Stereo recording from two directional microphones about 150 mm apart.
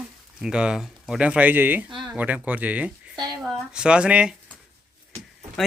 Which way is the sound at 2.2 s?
10° right (ahead or behind).